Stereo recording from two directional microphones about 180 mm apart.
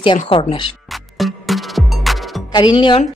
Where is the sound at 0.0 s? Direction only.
30° left (ahead or behind).